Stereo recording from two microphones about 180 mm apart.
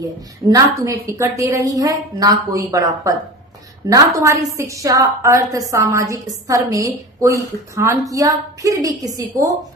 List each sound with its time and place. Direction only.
0.0 s a woman's voice: 20° right (ahead or behind)